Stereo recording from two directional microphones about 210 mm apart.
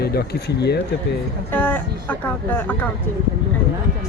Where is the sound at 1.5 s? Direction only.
10° left (ahead or behind).